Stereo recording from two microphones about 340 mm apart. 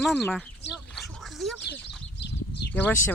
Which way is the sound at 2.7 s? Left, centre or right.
Centre.